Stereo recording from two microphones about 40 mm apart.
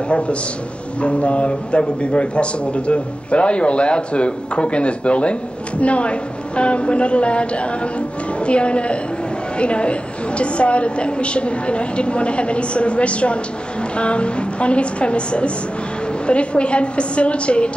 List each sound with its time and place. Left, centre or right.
1.0 s a man's voice: left